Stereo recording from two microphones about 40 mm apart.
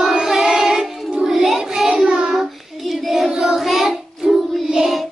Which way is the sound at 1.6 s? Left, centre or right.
Centre.